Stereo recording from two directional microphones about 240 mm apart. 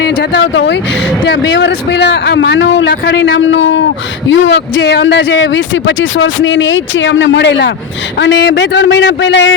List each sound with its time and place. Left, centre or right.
0.0 s a man's voice: left